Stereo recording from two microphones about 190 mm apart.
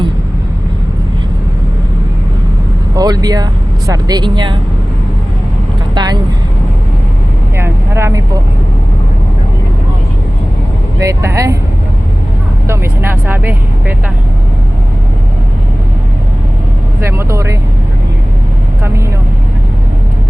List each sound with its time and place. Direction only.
2.9 s speech: 20° right (ahead or behind)
5.9 s vehicle: 20° right (ahead or behind)
7.5 s vehicle: 15° right (ahead or behind)
11.0 s speech: 15° right (ahead or behind)
12.6 s speech: 15° right (ahead or behind)
17.0 s speech: 15° right (ahead or behind)